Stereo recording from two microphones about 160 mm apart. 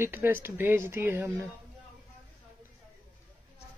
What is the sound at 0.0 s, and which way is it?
Speech, 15° right (ahead or behind).